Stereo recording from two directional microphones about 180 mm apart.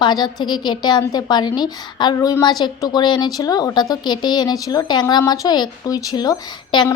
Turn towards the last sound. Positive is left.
turn(degrees=25)  # may be behind; listen again after turning